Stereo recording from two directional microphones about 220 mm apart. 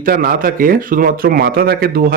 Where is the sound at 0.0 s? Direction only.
40° right (ahead or behind).